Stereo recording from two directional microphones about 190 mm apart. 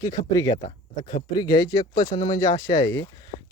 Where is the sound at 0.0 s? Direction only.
15° left (ahead or behind).